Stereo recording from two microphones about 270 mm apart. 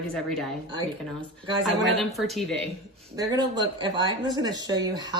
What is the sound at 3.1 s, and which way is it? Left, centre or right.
Speech, centre.